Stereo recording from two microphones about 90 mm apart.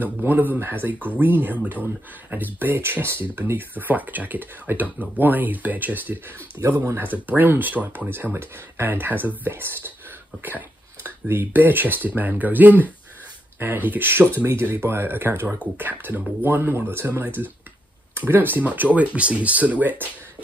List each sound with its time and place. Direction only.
0.0 s speech: 20° right (ahead or behind)
11.1 s speech: 25° right (ahead or behind)